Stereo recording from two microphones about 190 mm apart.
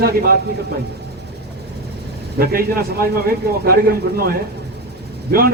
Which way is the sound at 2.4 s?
50° right (ahead or behind).